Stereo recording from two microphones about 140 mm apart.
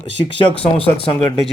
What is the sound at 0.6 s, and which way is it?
Speech, 45° left (ahead or behind).